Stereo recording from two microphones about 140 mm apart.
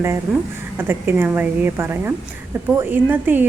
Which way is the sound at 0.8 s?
15° right (ahead or behind).